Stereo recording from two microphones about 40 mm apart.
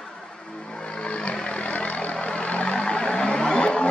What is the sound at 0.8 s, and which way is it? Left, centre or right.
Vehicle, left.